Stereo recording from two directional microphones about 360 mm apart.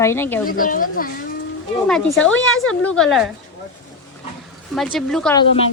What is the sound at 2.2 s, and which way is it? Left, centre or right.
Speech, left.